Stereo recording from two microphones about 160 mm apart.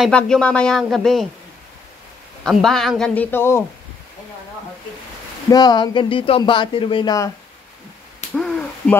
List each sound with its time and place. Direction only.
0.0 s speech: 5° left (ahead or behind)
2.4 s speech: centre (ahead or behind)
5.5 s speech: 25° left (ahead or behind)
8.4 s owl: 5° left (ahead or behind)